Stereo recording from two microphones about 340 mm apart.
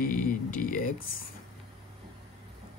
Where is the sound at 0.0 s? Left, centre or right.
Left.